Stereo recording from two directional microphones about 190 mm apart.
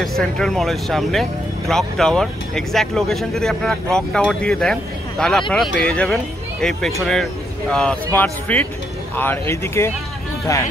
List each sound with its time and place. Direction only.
0.0 s speech: centre (ahead or behind)